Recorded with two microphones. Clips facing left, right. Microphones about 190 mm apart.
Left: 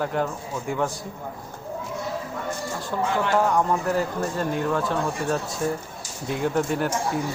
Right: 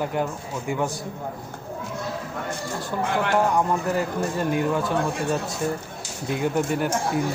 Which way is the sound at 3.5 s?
5° right (ahead or behind).